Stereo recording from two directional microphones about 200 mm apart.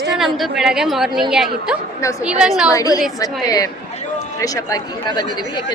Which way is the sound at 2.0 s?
15° left (ahead or behind).